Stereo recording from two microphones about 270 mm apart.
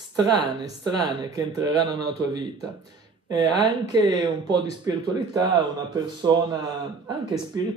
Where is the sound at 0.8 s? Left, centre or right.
Centre.